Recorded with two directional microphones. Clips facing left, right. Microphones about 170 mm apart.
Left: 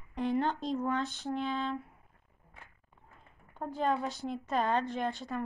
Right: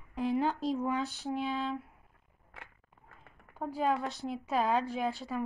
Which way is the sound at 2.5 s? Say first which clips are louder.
Right 4 dB; 90° right.